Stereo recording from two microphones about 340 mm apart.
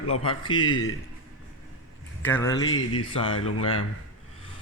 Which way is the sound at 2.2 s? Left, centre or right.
Centre.